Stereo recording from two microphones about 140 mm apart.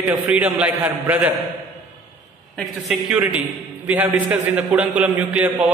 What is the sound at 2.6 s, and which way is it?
A man's voice, 5° right (ahead or behind).